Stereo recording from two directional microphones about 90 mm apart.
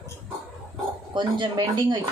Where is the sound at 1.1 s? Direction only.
60° right (ahead or behind).